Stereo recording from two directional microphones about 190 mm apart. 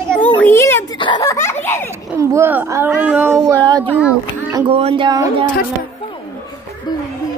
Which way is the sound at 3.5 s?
20° right (ahead or behind).